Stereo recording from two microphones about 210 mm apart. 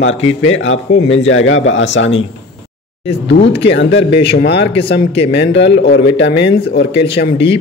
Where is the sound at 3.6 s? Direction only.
55° left (ahead or behind).